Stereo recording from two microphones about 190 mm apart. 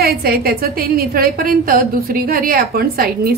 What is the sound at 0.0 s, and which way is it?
A woman's voice, 55° right (ahead or behind).